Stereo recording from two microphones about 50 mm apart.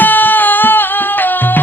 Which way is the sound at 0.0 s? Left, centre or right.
Left.